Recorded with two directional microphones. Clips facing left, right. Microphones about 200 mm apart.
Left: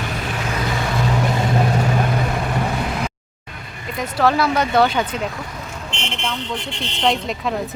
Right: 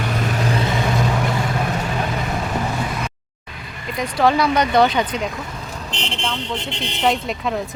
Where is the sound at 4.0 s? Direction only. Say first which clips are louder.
Right 1 dB; 5° left (ahead or behind).